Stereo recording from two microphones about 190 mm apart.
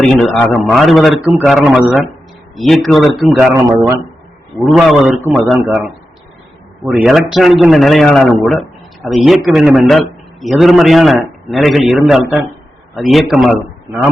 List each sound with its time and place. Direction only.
0.0 s a man's voice: 5° left (ahead or behind)
3.5 s speech: 15° right (ahead or behind)
4.5 s a man's voice: centre (ahead or behind)
5.2 s speech: 10° right (ahead or behind)
5.5 s a man's voice: centre (ahead or behind)
6.9 s a man's voice: centre (ahead or behind)